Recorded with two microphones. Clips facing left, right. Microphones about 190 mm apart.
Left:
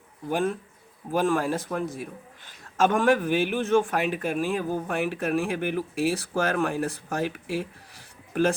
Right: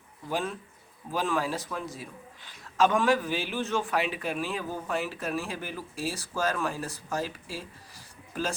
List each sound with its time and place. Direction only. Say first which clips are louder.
0.3 s a man's voice: left 6 dB; 55° left (ahead or behind)